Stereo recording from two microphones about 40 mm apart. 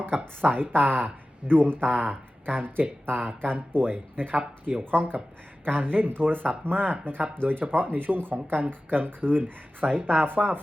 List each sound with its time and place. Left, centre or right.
0.4 s speech: right